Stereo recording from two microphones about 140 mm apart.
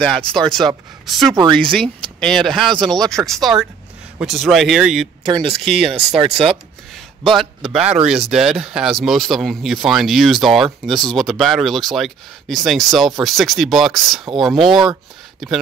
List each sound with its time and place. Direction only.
0.0 s speech: 5° left (ahead or behind)
5.3 s speech: 40° right (ahead or behind)
5.6 s speech: centre (ahead or behind)
7.2 s speech: centre (ahead or behind)